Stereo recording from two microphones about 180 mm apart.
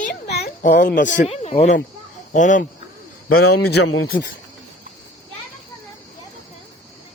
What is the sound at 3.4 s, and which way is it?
Speech, 65° left (ahead or behind).